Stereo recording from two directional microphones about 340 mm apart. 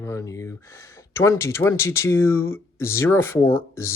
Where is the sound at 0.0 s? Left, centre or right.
Centre.